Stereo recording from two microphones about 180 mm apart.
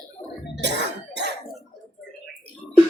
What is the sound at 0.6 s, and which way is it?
Cough, 75° right (ahead or behind).